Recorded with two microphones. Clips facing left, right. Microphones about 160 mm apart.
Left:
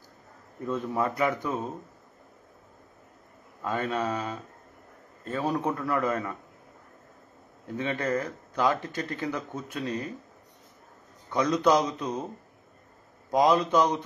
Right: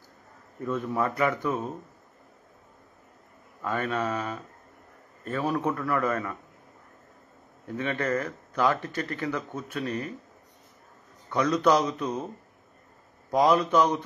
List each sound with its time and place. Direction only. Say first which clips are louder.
0.7 s speech: even; 15° left (ahead or behind)
3.6 s speech: even; 20° left (ahead or behind)
7.7 s speech: even; 15° left (ahead or behind)
11.3 s speech: even; 15° left (ahead or behind)
13.3 s speech: even; 15° left (ahead or behind)